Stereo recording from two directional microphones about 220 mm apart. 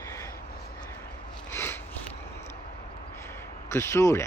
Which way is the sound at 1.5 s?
10° left (ahead or behind).